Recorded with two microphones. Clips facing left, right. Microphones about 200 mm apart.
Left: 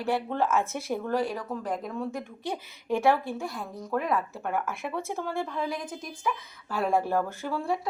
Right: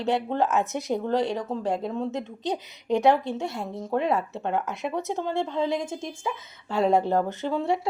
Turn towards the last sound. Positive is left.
turn(degrees=-25)  # may be behind; listen again after turning